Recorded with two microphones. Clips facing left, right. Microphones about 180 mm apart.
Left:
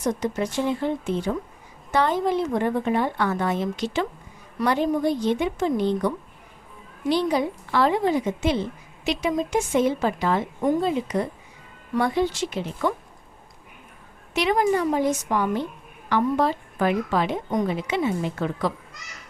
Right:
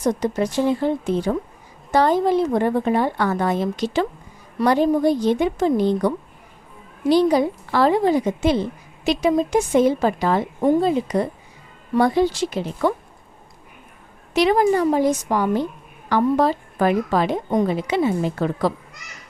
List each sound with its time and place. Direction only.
0.0 s a woman's voice: 35° right (ahead or behind)
14.3 s a woman's voice: 35° right (ahead or behind)